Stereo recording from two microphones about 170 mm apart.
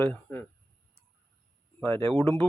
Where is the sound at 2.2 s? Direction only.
15° left (ahead or behind).